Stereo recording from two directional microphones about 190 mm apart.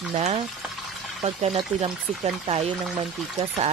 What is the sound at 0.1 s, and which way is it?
Speech, 35° right (ahead or behind).